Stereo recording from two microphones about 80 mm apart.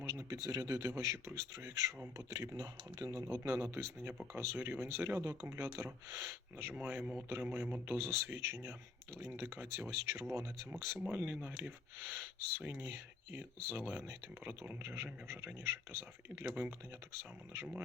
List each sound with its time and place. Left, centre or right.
0.0 s a sound: right
0.4 s speech: right
6.7 s speech: centre; by 10.2 s right
11.1 s speech: right